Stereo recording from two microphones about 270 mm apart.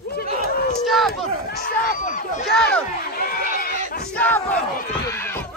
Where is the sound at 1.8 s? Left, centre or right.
Left.